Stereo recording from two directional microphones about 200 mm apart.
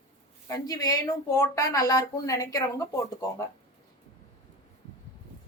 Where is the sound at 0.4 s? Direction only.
15° left (ahead or behind).